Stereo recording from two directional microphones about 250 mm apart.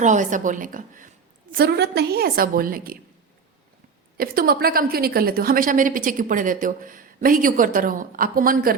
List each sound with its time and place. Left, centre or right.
0.0 s a woman's voice: right
4.2 s a woman's voice: right